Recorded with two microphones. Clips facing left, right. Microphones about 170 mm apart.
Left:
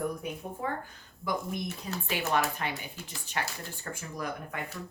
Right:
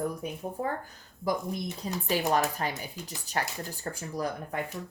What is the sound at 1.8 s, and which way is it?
Speech, 35° right (ahead or behind).